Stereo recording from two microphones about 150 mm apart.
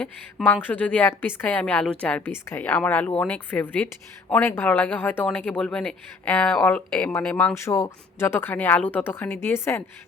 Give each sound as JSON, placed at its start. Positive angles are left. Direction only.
{"t": 0.0, "sound": "a woman's voice", "side_deg": 10}
{"t": 7.6, "sound": "a woman's voice", "side_deg": 20}